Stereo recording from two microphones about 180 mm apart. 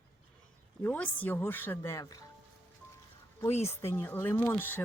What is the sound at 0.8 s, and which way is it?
Speech, 10° left (ahead or behind).